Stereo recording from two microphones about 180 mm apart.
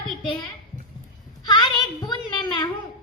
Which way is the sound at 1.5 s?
25° left (ahead or behind).